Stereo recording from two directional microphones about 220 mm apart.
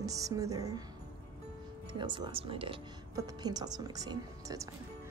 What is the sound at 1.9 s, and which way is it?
Speech, 20° right (ahead or behind).